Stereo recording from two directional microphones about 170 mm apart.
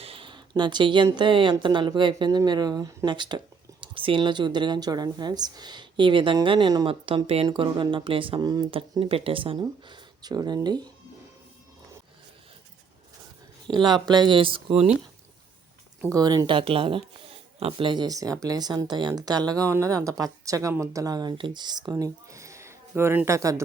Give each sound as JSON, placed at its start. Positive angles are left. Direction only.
{"t": 0.0, "sound": "speech", "side_deg": -30}
{"t": 13.7, "sound": "speech", "side_deg": -25}
{"t": 16.0, "sound": "speech", "side_deg": -20}